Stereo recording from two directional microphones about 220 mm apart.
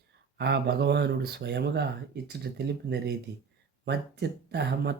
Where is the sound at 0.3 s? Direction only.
50° right (ahead or behind).